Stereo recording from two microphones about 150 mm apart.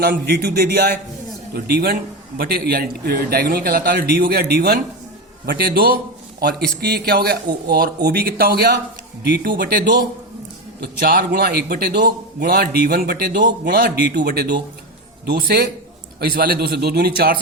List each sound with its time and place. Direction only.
0.0 s a man's voice: 90° right
10.8 s a man's voice: 90° right